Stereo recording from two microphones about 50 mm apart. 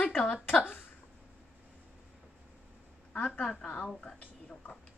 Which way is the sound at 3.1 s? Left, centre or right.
Left.